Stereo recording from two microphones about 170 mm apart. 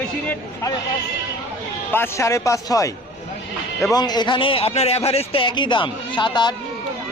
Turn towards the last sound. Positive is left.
turn(degrees=25)  # may be behind; listen again after turning